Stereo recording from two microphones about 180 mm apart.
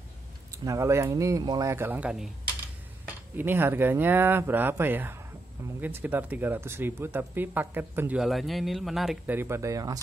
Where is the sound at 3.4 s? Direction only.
10° right (ahead or behind).